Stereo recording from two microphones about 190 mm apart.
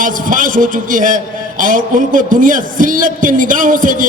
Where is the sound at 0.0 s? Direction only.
45° right (ahead or behind).